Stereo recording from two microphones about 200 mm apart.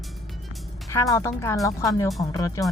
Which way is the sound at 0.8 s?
15° left (ahead or behind).